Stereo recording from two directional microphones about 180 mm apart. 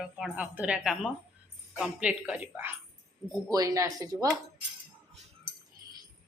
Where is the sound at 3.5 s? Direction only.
20° right (ahead or behind).